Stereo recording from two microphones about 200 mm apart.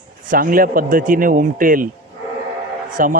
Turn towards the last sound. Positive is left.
turn(degrees=-40)  # may be behind; listen again after turning